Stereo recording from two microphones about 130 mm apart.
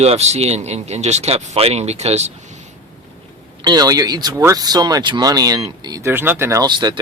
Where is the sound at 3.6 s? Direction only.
35° right (ahead or behind).